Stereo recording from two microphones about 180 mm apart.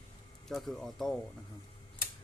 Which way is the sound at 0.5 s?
Centre (ahead or behind).